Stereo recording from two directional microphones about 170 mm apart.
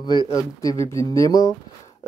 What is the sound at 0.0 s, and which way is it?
Speech, 25° left (ahead or behind).